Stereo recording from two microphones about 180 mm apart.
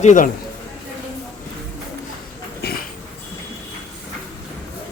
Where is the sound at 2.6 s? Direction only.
60° left (ahead or behind).